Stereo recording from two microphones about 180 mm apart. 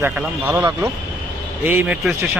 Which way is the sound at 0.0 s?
10° right (ahead or behind).